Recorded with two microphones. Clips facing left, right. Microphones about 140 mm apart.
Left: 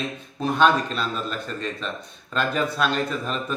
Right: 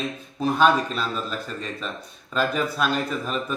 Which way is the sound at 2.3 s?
5° right (ahead or behind).